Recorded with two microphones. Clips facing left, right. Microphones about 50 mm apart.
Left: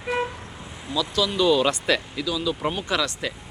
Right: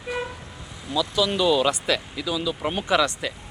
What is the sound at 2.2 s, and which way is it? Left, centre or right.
Speech, centre.